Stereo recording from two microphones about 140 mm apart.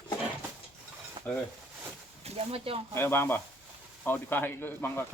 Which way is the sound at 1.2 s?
30° right (ahead or behind).